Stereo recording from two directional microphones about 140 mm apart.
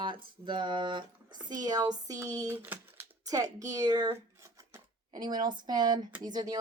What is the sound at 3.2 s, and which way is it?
Speech, 25° right (ahead or behind).